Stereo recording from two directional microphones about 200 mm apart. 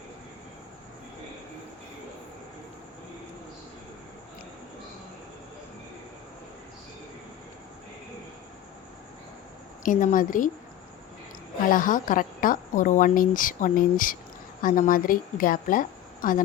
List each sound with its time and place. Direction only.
9.8 s a woman's voice: 40° left (ahead or behind)
11.7 s a woman's voice: 40° left (ahead or behind)